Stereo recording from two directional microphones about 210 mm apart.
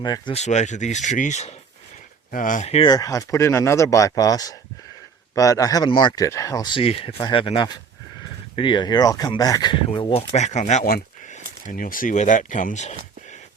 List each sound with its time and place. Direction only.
0.0 s speech: 20° left (ahead or behind)